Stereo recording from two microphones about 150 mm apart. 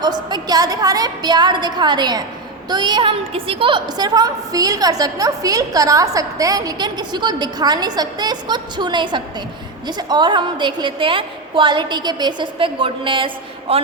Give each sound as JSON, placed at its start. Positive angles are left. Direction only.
{"t": 0.0, "sound": "a woman's voice", "side_deg": -30}